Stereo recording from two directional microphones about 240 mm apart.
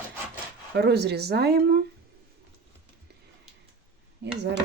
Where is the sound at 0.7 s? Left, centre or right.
Right.